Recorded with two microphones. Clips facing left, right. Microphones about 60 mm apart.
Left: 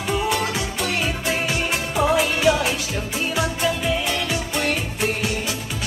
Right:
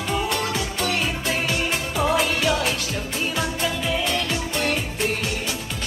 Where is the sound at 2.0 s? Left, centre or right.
Centre.